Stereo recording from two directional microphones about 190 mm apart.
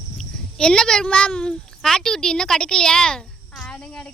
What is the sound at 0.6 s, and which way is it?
Speech, 5° left (ahead or behind).